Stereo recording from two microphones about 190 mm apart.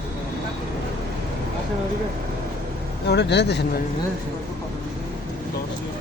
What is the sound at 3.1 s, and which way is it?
Speech, 65° left (ahead or behind).